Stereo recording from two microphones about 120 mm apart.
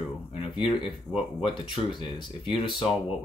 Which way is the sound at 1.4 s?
40° left (ahead or behind).